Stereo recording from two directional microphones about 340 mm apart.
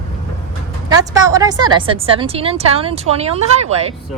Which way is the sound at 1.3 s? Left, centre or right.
Centre.